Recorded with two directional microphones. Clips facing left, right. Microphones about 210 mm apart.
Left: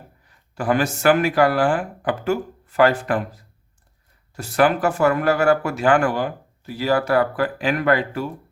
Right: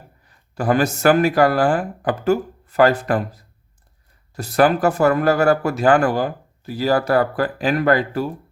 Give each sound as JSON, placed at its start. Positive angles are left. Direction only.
{"t": 0.3, "sound": "speech", "side_deg": -40}